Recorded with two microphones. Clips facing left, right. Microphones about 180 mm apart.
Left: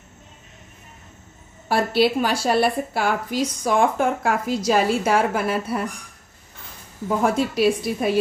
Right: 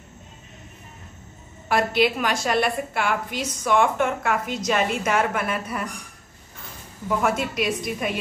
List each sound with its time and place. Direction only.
1.7 s a woman's voice: 30° left (ahead or behind)
7.2 s a woman's voice: 35° left (ahead or behind)